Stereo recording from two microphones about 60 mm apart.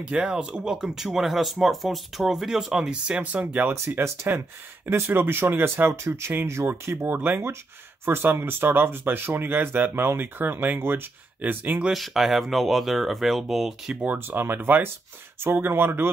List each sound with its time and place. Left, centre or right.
0.0 s speech: centre
3.9 s speech: right
11.9 s speech: centre
14.0 s speech: right